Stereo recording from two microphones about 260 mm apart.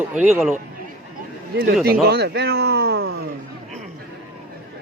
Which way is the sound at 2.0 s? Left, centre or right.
Right.